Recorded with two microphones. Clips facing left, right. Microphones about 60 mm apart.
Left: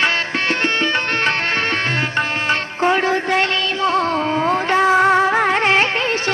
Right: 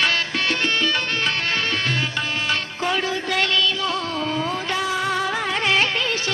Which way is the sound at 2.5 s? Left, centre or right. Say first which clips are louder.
Left 8 dB; left.